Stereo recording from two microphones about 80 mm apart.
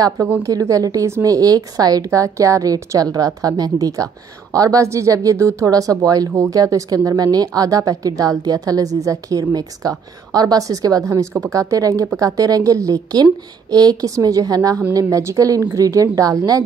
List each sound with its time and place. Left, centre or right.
0.4 s a woman's voice: right